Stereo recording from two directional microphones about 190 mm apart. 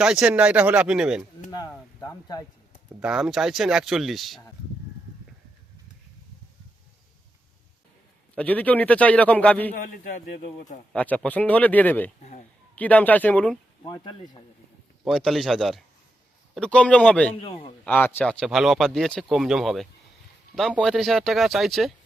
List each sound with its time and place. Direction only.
0.0 s speech: 5° right (ahead or behind)
1.5 s a sound: 20° left (ahead or behind)
2.0 s speech: 20° left (ahead or behind)
3.0 s speech: 5° right (ahead or behind)
8.4 s a man's voice: 10° left (ahead or behind)
9.7 s speech: 50° left (ahead or behind)
10.9 s a man's voice: 10° left (ahead or behind)
13.8 s speech: 25° left (ahead or behind)
15.0 s a man's voice: centre (ahead or behind)
17.4 s speech: 30° left (ahead or behind)
17.8 s speech: 10° left (ahead or behind)